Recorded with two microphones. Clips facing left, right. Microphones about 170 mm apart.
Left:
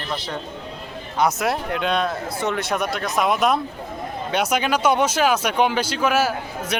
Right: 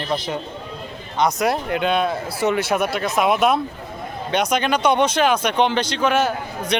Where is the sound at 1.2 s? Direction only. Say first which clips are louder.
Right 1 dB; 5° left (ahead or behind).